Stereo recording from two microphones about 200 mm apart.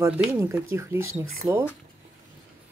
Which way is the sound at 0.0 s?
15° right (ahead or behind).